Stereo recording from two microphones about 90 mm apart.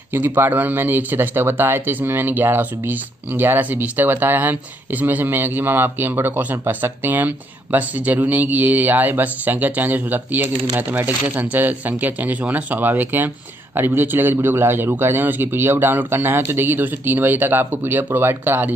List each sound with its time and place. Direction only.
0.1 s speech: 25° right (ahead or behind)